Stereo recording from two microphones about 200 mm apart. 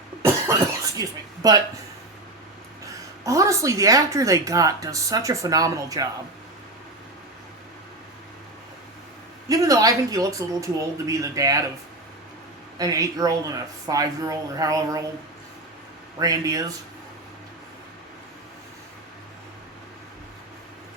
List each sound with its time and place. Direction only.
0.9 s a woman's voice: 20° right (ahead or behind)
2.8 s a woman's voice: 15° right (ahead or behind)
9.5 s a woman's voice: 15° right (ahead or behind)
12.8 s a woman's voice: 15° right (ahead or behind)
16.1 s a woman's voice: 15° right (ahead or behind)